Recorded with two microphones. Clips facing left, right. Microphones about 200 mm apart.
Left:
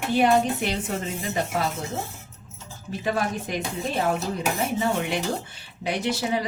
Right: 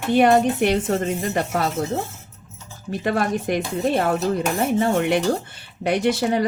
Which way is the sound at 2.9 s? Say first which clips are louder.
Right 5 dB; 65° right (ahead or behind).